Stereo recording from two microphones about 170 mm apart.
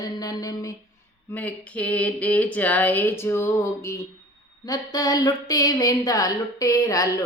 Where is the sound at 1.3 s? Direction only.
10° left (ahead or behind).